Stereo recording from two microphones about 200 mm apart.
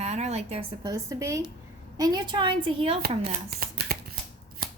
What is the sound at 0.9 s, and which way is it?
A woman's voice, 15° right (ahead or behind).